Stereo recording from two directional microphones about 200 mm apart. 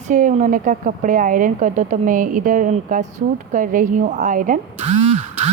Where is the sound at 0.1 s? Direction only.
40° right (ahead or behind).